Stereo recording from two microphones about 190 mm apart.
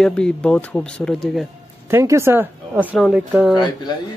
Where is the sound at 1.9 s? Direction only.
15° right (ahead or behind).